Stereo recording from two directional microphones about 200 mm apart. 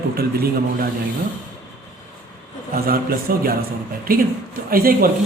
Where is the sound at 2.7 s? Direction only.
50° right (ahead or behind).